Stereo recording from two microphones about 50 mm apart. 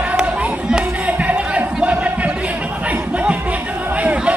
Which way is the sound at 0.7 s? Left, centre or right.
Centre.